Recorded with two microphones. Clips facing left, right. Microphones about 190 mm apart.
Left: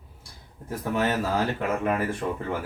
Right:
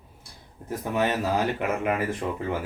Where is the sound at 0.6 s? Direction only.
15° right (ahead or behind).